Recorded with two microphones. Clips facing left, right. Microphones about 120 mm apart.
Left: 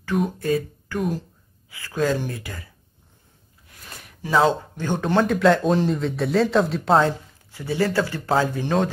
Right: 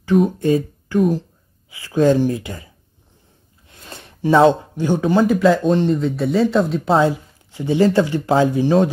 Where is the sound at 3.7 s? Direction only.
25° right (ahead or behind).